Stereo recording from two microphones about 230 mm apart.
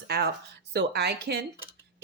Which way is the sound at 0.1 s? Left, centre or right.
Right.